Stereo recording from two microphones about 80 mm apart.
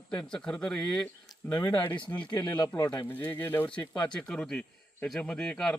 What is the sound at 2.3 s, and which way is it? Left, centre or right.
Speech, left.